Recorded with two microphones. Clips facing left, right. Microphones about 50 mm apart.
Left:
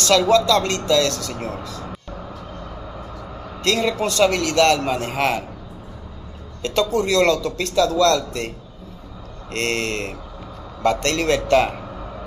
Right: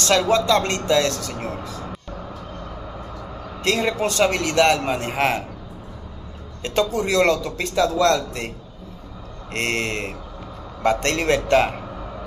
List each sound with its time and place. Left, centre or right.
0.0 s speech: centre
1.9 s vehicle: centre
3.6 s speech: centre
6.6 s speech: centre
9.5 s a man's voice: centre